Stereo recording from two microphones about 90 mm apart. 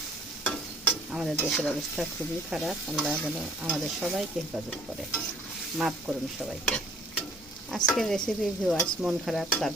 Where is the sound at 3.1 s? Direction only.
15° right (ahead or behind).